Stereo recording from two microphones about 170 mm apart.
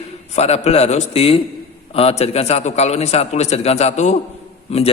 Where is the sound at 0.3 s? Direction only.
40° left (ahead or behind).